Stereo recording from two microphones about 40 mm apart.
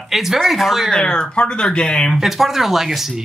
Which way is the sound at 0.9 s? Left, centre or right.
Centre.